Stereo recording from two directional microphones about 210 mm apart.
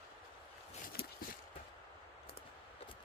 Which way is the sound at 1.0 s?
45° left (ahead or behind).